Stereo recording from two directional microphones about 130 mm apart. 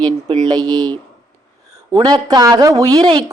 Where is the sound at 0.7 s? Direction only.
5° left (ahead or behind).